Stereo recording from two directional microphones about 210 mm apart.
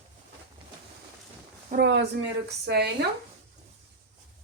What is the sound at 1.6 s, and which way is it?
Speech, 50° right (ahead or behind).